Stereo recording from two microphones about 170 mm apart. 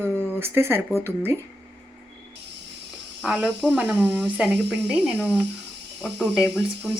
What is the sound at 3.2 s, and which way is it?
Speech, centre (ahead or behind).